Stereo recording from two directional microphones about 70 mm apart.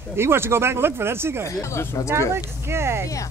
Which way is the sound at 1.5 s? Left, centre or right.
Left.